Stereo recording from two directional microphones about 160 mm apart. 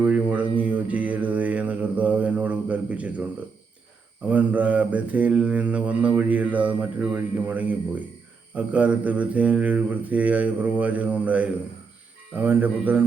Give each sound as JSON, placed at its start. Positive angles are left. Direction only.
{"t": 0.0, "sound": "a sound", "side_deg": -10}
{"t": 0.6, "sound": "mantra", "side_deg": -10}
{"t": 4.3, "sound": "mantra", "side_deg": -10}